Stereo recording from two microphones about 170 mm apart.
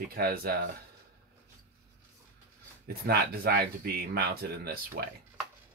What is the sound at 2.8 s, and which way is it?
Speech, 65° right (ahead or behind).